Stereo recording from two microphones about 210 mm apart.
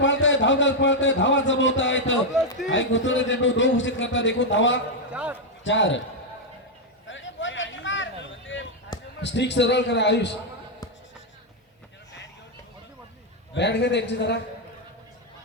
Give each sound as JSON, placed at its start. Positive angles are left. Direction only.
{"t": 0.0, "sound": "a man's voice", "side_deg": 60}
{"t": 5.1, "sound": "a man's voice", "side_deg": -5}
{"t": 5.6, "sound": "a man's voice", "side_deg": 60}
{"t": 7.1, "sound": "a sound", "side_deg": 60}
{"t": 9.2, "sound": "a man's voice", "side_deg": 55}
{"t": 13.5, "sound": "a man's voice", "side_deg": 55}